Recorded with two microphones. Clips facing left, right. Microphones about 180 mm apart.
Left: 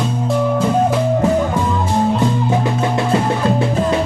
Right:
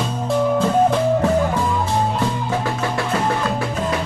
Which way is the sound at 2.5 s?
25° left (ahead or behind).